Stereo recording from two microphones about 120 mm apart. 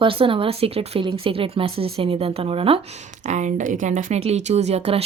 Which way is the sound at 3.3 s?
85° right.